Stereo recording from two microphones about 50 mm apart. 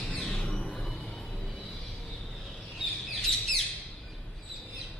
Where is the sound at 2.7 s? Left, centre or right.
Centre.